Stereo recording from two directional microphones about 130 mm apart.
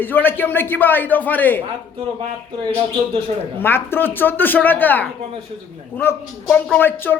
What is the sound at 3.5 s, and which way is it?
A man's voice, 15° left (ahead or behind).